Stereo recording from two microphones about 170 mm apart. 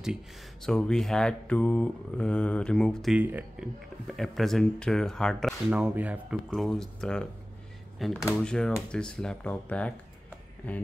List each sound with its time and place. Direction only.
0.0 s speech: centre (ahead or behind)
4.1 s speech: centre (ahead or behind)
5.7 s speech: 10° right (ahead or behind)
6.5 s speech: centre (ahead or behind)